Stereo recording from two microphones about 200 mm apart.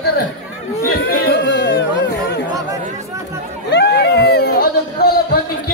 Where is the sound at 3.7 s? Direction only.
55° left (ahead or behind).